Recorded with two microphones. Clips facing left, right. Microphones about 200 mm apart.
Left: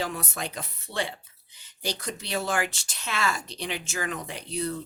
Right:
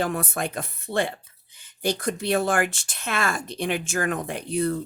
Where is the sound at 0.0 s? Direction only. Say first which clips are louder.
Right 6 dB; 55° right (ahead or behind).